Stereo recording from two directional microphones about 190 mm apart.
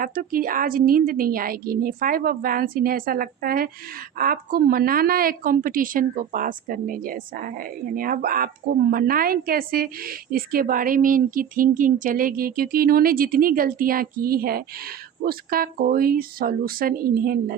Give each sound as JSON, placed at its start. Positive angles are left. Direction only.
{"t": 0.0, "sound": "a woman's voice", "side_deg": -50}